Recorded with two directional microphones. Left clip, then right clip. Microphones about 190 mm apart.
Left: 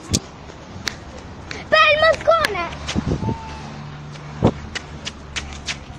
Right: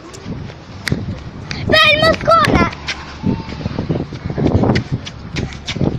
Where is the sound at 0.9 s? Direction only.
35° right (ahead or behind).